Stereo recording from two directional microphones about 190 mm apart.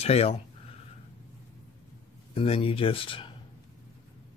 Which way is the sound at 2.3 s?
30° left (ahead or behind).